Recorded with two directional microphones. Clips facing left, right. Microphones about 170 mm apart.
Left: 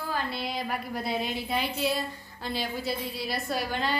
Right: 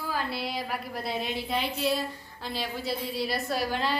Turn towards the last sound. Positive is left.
turn(degrees=0)  # may be behind; listen again after turning